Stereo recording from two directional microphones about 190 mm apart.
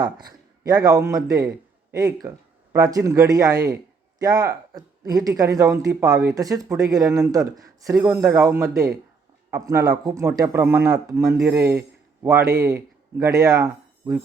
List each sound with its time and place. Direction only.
0.0 s a man's voice: 20° right (ahead or behind)